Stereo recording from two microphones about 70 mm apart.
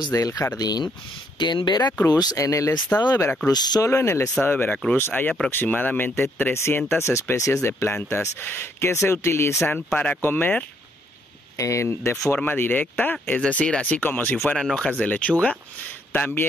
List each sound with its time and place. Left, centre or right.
0.1 s speech: left
0.6 s speech: left
1.4 s speech: left
2.0 s speech: left
2.3 s speech: left
2.9 s speech: left
3.4 s speech: left
3.8 s speech: left
7.6 s speech: left
11.5 s speech: left
12.4 s speech: left
14.6 s speech: centre
14.9 s speech: left